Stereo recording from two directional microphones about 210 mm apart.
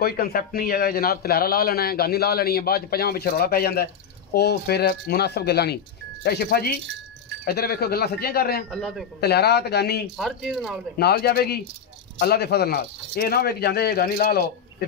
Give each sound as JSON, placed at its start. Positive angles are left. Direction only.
{"t": 0.0, "sound": "a man's voice", "side_deg": 45}
{"t": 8.6, "sound": "speech", "side_deg": 0}
{"t": 9.2, "sound": "a man's voice", "side_deg": 50}
{"t": 10.1, "sound": "speech", "side_deg": 0}
{"t": 11.0, "sound": "a man's voice", "side_deg": 50}